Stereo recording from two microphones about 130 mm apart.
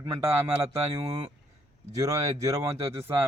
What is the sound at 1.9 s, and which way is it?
Speech, 25° right (ahead or behind).